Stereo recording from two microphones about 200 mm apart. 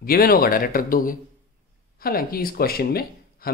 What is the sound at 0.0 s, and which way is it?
Speech, 45° left (ahead or behind).